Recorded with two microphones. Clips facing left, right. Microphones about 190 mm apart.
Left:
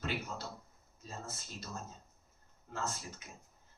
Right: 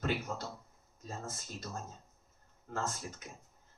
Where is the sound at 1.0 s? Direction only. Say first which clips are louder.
Right 3 dB; 50° right (ahead or behind).